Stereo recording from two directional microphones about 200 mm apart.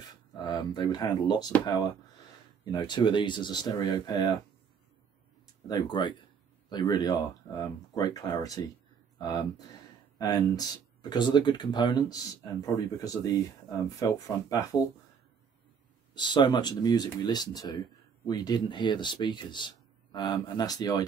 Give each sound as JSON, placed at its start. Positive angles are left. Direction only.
{"t": 0.3, "sound": "speech", "side_deg": 25}
{"t": 2.6, "sound": "speech", "side_deg": 25}
{"t": 5.7, "sound": "speech", "side_deg": 20}
{"t": 10.1, "sound": "speech", "side_deg": 20}
{"t": 16.2, "sound": "speech", "side_deg": 25}